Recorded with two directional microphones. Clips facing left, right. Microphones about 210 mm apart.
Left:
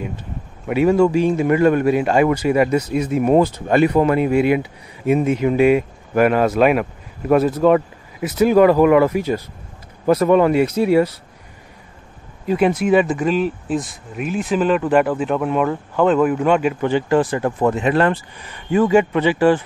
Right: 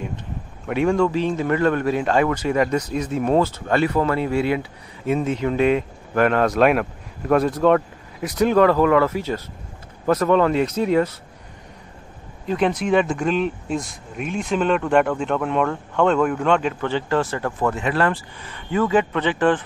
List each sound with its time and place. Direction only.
0.7 s a man's voice: 5° left (ahead or behind)
12.4 s a man's voice: 5° left (ahead or behind)